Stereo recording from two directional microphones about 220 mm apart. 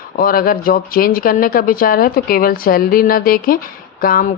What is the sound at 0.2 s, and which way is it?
Speech, 40° left (ahead or behind).